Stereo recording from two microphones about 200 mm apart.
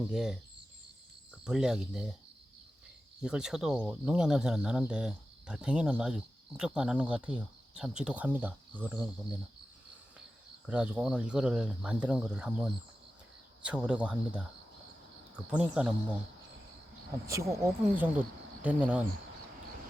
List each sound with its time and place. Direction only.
0.1 s speech: 5° right (ahead or behind)
1.5 s speech: 5° right (ahead or behind)
3.2 s speech: 5° right (ahead or behind)
10.7 s speech: 5° right (ahead or behind)
15.4 s speech: 5° right (ahead or behind)
17.2 s speech: 15° right (ahead or behind)